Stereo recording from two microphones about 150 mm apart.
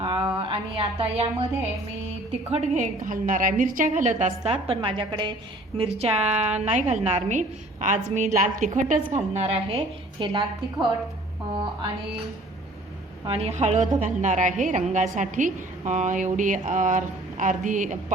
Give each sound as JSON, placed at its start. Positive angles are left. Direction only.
{"t": 0.0, "sound": "a sound", "side_deg": -40}
{"t": 0.3, "sound": "a woman's voice", "side_deg": -40}
{"t": 9.1, "sound": "a woman's voice", "side_deg": -45}
{"t": 13.2, "sound": "a woman's voice", "side_deg": -40}